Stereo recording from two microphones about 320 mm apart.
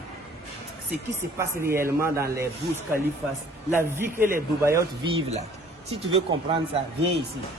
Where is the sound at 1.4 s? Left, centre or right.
Centre.